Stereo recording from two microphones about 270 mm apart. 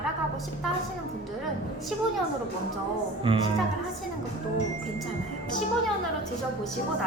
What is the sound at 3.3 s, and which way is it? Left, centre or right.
Speech, centre.